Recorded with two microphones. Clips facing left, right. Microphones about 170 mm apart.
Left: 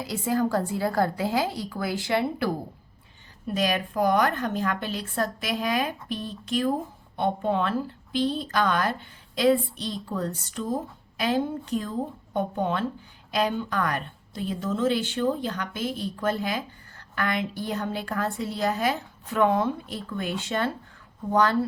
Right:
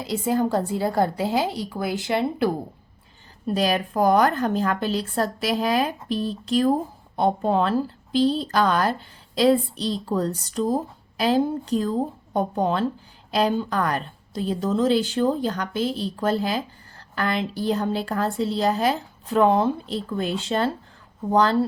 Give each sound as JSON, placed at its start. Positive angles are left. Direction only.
{"t": 0.0, "sound": "a woman's voice", "side_deg": -20}
{"t": 3.4, "sound": "a woman's voice", "side_deg": -35}